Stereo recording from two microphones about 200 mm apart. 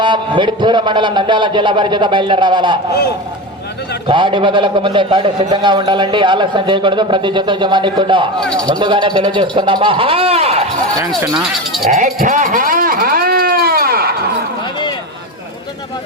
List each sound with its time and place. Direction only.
0.0 s a man's voice: 25° right (ahead or behind)
4.1 s a man's voice: 25° right (ahead or behind)
11.3 s speech: centre (ahead or behind)
11.9 s a sound: 40° right (ahead or behind)